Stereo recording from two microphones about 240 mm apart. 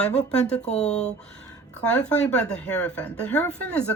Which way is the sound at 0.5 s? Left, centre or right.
Left.